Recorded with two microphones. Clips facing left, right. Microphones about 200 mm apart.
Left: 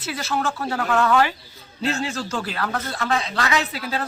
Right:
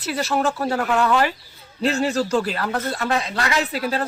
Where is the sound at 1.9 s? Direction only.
35° right (ahead or behind).